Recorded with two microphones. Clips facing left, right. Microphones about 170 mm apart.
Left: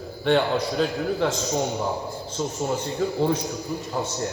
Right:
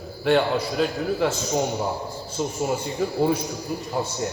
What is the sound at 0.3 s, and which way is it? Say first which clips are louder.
A man's voice: right 1 dB; centre (ahead or behind).